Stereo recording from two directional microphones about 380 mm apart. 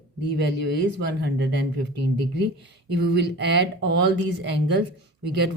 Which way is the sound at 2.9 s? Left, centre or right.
Right.